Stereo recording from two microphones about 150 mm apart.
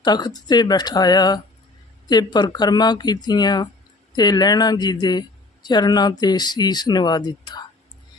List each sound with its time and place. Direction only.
0.0 s speech: 30° left (ahead or behind)